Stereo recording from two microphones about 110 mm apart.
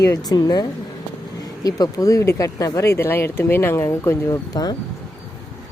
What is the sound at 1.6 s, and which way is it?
Speech, 35° left (ahead or behind).